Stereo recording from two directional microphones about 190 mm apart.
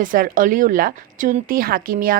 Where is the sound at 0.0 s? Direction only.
45° right (ahead or behind).